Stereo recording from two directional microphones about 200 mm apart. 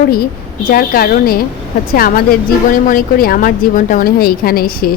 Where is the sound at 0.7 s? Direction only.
50° left (ahead or behind).